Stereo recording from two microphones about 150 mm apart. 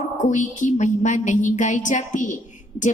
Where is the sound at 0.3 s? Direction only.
55° left (ahead or behind).